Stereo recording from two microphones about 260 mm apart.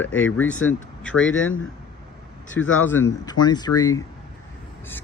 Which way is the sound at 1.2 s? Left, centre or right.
Left.